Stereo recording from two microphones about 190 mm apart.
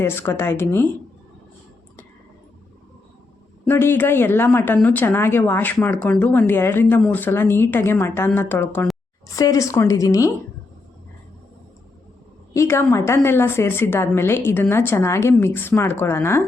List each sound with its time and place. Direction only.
0.0 s speech: 10° left (ahead or behind)
3.7 s speech: 10° left (ahead or behind)
12.5 s speech: 15° left (ahead or behind)